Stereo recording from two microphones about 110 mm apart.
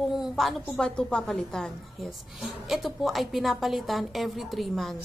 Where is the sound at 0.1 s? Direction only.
Centre (ahead or behind).